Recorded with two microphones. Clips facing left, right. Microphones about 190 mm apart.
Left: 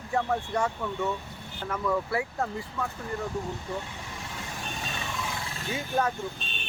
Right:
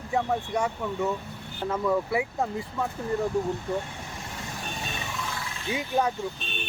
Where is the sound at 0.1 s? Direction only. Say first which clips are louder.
Right 1 dB; 15° right (ahead or behind).